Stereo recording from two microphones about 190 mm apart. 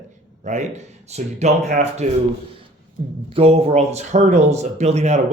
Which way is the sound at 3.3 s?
30° right (ahead or behind).